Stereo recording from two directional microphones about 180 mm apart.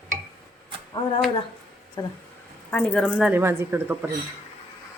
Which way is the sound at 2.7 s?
5° left (ahead or behind).